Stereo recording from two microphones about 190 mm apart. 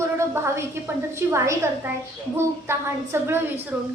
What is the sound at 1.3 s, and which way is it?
A woman's voice, 15° right (ahead or behind).